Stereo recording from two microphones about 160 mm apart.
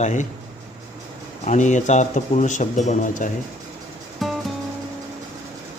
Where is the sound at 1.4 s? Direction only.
50° left (ahead or behind).